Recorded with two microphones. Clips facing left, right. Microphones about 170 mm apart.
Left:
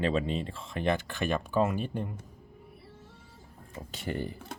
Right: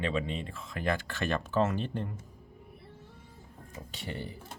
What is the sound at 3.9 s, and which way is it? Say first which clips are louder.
Speech: left 6 dB; 45° left (ahead or behind).